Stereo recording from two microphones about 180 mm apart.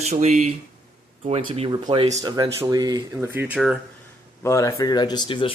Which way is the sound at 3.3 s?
10° right (ahead or behind).